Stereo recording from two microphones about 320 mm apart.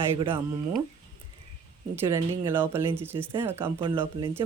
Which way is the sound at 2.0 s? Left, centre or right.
Centre.